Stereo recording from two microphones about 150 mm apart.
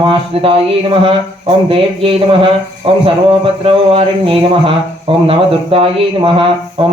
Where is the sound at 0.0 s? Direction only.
35° right (ahead or behind).